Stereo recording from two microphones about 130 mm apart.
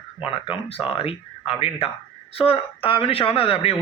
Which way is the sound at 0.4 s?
45° left (ahead or behind).